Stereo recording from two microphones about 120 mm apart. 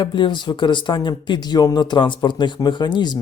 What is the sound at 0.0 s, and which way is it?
Speech, 40° left (ahead or behind).